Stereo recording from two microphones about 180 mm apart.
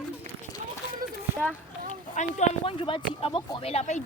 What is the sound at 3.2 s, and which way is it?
Speech, 30° left (ahead or behind).